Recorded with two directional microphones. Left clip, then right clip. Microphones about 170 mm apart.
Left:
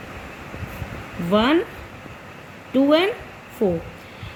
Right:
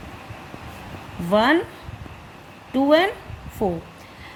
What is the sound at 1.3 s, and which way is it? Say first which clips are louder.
Speech: right 1 dB; 70° right (ahead or behind).